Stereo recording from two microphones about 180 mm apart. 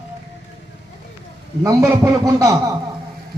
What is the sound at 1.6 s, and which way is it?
A man's voice, 20° right (ahead or behind).